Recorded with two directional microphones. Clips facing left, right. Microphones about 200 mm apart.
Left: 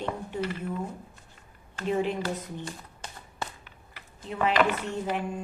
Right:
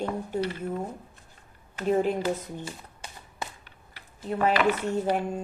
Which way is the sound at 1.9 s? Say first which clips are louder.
Right 3 dB; 45° right (ahead or behind).